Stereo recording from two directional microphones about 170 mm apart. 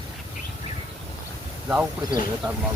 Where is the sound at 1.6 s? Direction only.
5° right (ahead or behind).